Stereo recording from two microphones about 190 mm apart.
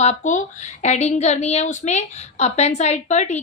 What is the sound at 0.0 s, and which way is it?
A woman's voice, 40° left (ahead or behind).